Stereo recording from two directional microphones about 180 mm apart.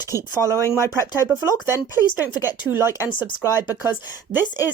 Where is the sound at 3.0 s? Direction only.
25° left (ahead or behind).